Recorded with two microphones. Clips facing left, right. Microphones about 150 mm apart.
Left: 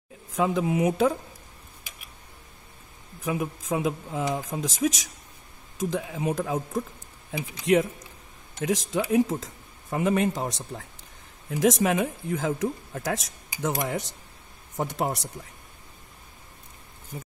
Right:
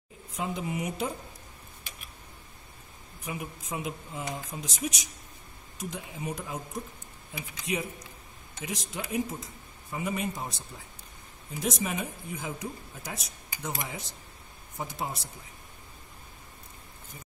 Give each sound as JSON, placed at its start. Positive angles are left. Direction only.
{"t": 0.4, "sound": "speech", "side_deg": 90}
{"t": 3.3, "sound": "speech", "side_deg": 90}
{"t": 11.5, "sound": "speech", "side_deg": 90}